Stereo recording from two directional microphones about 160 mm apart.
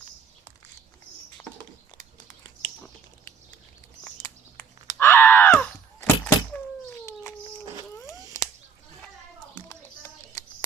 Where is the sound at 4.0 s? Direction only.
15° left (ahead or behind).